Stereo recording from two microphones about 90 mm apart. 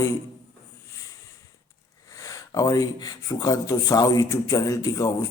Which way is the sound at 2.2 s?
40° left (ahead or behind).